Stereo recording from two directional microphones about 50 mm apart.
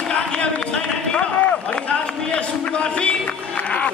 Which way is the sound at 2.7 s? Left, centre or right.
Left.